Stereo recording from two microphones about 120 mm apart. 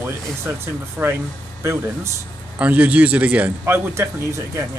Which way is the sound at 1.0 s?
10° right (ahead or behind).